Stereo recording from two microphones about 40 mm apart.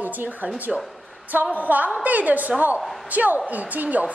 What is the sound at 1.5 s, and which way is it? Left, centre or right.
A woman's voice, right.